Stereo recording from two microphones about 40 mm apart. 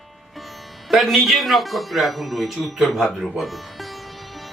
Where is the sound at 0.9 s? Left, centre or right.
Centre.